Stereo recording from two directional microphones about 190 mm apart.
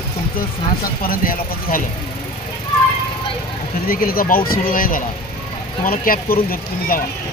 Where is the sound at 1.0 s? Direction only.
50° left (ahead or behind).